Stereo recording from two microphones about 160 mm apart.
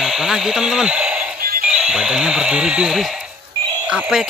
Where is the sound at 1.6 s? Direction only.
5° right (ahead or behind).